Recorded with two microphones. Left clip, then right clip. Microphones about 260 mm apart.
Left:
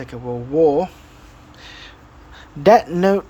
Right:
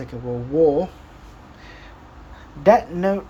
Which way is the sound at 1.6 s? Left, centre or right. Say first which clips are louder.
Left 6 dB; left.